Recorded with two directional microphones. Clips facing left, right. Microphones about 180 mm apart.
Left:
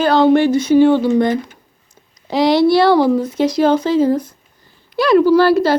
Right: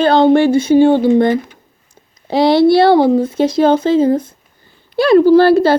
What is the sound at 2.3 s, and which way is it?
Speech, 30° right (ahead or behind).